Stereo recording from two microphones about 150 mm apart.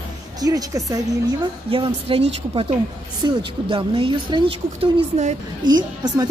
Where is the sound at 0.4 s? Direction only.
25° right (ahead or behind).